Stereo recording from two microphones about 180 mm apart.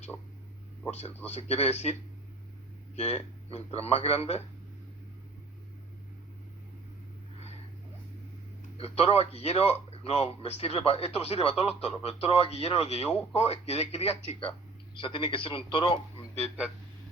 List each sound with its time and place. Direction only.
0.9 s a man's voice: 40° left (ahead or behind)
8.8 s a man's voice: 35° left (ahead or behind)